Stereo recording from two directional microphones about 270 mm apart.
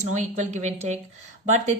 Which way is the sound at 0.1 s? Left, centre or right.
Right.